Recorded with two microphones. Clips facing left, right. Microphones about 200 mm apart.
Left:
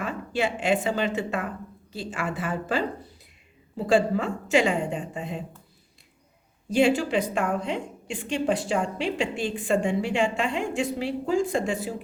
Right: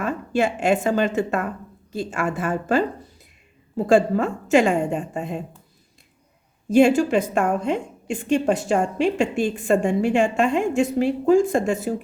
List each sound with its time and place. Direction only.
0.0 s a woman's voice: 45° right (ahead or behind)
6.7 s a woman's voice: 45° right (ahead or behind)